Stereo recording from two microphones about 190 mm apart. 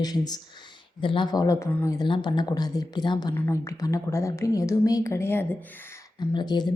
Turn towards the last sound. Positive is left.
turn(degrees=20)  # may be behind; listen again after turning